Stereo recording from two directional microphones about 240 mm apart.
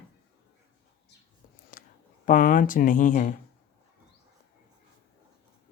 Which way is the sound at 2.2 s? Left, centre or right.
Left.